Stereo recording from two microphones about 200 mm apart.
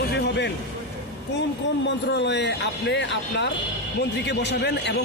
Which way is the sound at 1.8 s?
60° left (ahead or behind).